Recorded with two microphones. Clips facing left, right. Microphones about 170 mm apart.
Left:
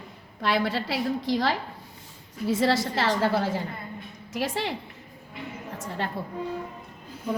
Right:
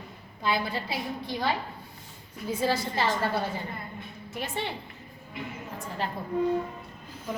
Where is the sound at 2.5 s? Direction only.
90° left.